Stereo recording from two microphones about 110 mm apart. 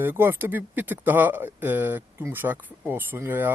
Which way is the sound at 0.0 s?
20° right (ahead or behind).